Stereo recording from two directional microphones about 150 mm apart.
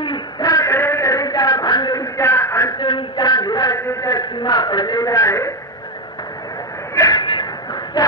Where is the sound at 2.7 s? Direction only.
30° left (ahead or behind).